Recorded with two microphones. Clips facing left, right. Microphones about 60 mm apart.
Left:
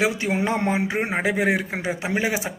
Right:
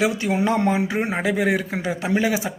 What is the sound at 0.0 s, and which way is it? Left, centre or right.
Speech, left.